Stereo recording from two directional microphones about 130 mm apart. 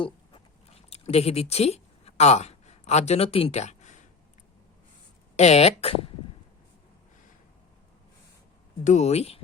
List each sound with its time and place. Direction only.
0.9 s speech: 50° left (ahead or behind)
5.4 s speech: 55° left (ahead or behind)
8.8 s speech: 65° left (ahead or behind)